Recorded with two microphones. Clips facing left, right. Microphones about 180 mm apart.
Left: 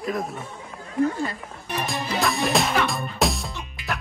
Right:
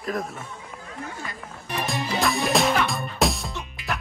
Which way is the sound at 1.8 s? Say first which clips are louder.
Right 1 dB; centre (ahead or behind).